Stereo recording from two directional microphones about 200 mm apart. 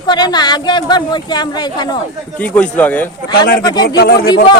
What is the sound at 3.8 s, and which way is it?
Speech, 50° left (ahead or behind).